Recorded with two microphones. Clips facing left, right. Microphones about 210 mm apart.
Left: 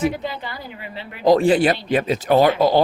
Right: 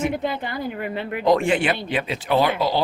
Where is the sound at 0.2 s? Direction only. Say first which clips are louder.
Right 4 dB; 55° right (ahead or behind).